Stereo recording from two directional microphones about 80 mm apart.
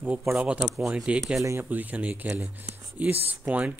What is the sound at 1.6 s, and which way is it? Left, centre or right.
Speech, centre.